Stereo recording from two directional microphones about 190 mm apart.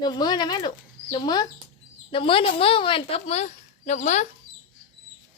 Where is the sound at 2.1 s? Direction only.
30° left (ahead or behind).